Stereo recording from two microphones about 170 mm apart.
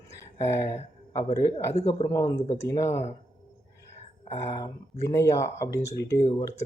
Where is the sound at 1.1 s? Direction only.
20° left (ahead or behind).